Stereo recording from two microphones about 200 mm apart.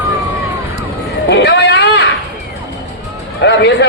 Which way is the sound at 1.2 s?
55° left (ahead or behind).